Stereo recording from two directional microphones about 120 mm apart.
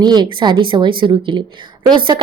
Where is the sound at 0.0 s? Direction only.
35° right (ahead or behind).